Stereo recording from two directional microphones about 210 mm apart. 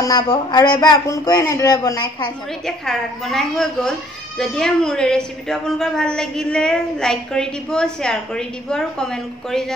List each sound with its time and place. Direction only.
0.0 s a man's voice: 20° left (ahead or behind)
2.6 s a woman's voice: centre (ahead or behind)